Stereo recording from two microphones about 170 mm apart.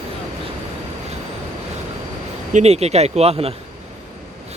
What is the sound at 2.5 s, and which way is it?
Speech, 40° right (ahead or behind).